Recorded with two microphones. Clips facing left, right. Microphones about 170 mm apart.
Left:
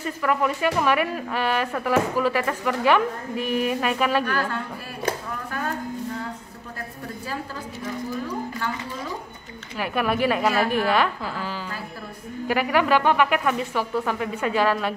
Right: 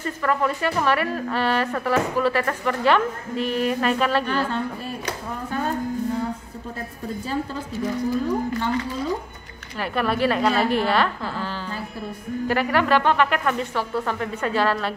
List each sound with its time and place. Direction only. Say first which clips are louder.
0.0 s speech: even; 10° left (ahead or behind)
4.2 s a woman's voice: right 1 dB; 25° right (ahead or behind)
9.8 s speech: right 1 dB; 10° left (ahead or behind)